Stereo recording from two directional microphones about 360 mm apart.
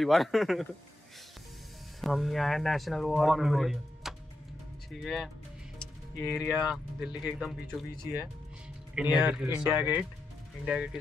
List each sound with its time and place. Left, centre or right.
0.0 s speech: centre
2.0 s speech: centre
7.9 s speech: centre
8.9 s speech: centre